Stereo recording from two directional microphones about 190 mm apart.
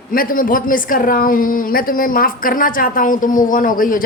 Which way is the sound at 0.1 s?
50° left (ahead or behind).